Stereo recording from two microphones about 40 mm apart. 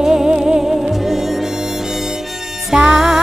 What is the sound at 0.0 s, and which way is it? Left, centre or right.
Music, centre.